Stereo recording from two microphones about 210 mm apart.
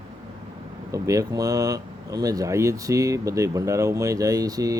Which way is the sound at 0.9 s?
15° right (ahead or behind).